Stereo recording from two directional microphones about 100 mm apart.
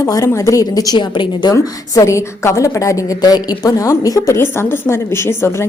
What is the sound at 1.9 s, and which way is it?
A woman's voice, 30° left (ahead or behind).